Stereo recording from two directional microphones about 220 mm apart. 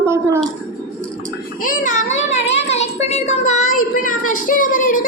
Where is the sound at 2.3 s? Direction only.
30° left (ahead or behind).